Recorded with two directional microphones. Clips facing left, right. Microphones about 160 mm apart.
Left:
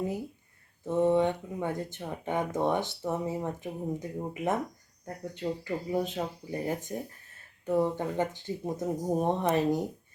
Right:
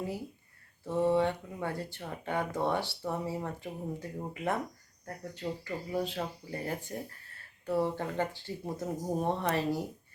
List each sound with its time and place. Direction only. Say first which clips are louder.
0.9 s speech: left 3 dB; 20° left (ahead or behind)